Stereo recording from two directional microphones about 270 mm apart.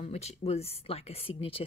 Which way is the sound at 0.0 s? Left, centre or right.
Left.